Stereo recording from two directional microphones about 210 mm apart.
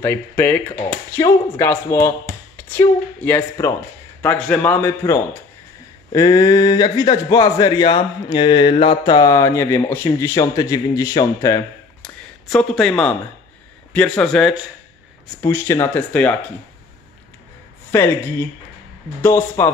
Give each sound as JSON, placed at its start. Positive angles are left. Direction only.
{"t": 0.0, "sound": "speech", "side_deg": 10}
{"t": 12.0, "sound": "speech", "side_deg": 5}
{"t": 15.4, "sound": "speech", "side_deg": 15}
{"t": 17.9, "sound": "speech", "side_deg": 10}